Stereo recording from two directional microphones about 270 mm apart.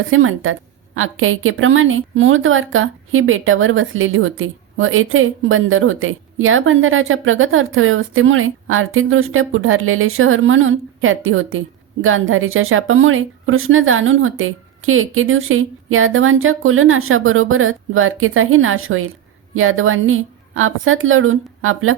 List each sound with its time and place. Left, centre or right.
0.1 s a woman's voice: right